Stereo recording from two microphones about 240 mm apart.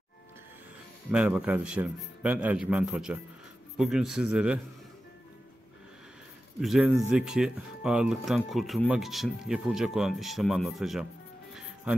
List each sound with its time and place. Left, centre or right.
1.1 s speech: centre
6.6 s speech: centre